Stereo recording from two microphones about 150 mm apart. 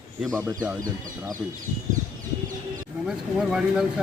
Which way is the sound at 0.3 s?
20° right (ahead or behind).